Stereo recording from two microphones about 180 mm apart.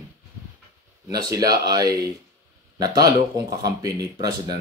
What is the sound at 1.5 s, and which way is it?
Speech, 20° right (ahead or behind).